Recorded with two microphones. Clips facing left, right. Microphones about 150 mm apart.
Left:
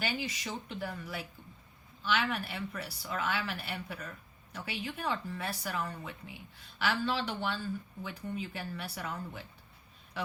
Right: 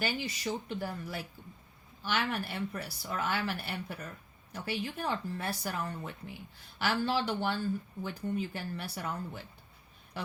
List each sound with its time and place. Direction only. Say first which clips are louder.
0.0 s speech: right 2 dB; 40° right (ahead or behind)